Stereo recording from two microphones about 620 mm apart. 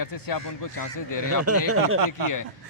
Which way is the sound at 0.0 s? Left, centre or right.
Left.